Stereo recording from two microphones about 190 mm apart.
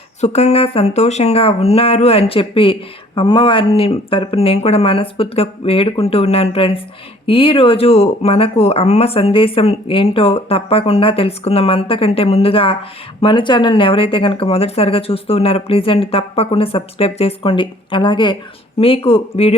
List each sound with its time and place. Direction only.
0.2 s speech: 35° left (ahead or behind)